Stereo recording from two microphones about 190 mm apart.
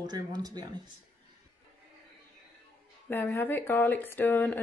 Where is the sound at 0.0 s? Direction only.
20° right (ahead or behind).